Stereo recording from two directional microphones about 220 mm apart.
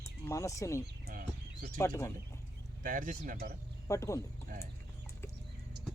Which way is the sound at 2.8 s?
35° right (ahead or behind).